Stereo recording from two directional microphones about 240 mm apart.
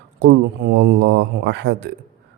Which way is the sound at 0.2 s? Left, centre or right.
Right.